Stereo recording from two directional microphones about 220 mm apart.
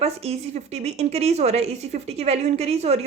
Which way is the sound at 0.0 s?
30° right (ahead or behind).